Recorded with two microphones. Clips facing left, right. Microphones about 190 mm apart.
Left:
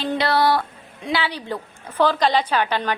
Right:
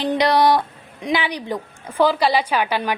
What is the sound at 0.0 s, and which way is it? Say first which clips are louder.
A woman's voice: right 3 dB; 15° right (ahead or behind).